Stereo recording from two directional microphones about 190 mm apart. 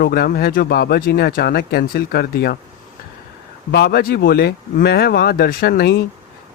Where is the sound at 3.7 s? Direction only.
60° left (ahead or behind).